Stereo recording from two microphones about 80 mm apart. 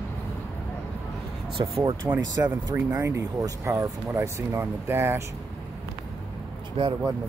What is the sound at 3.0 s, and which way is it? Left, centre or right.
Speech, right.